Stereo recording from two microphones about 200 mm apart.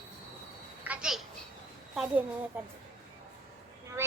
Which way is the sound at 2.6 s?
10° right (ahead or behind).